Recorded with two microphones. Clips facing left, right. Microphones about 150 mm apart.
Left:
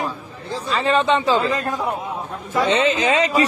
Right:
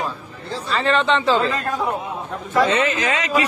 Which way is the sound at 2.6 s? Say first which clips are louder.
Left 2 dB; 25° left (ahead or behind).